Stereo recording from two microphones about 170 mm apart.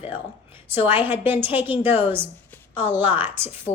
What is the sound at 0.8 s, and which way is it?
A woman's voice, 10° right (ahead or behind).